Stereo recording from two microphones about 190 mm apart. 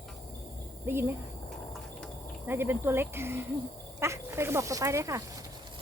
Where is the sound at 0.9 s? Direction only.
15° right (ahead or behind).